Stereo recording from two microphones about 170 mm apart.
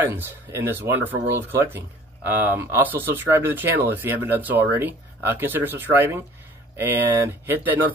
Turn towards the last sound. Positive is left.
turn(degrees=-10)  # may be behind; listen again after turning